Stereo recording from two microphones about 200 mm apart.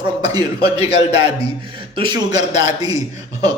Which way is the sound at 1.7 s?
25° right (ahead or behind).